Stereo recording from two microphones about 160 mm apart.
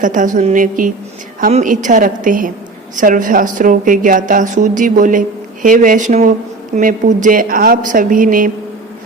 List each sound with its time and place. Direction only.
0.0 s a woman's voice: 55° right (ahead or behind)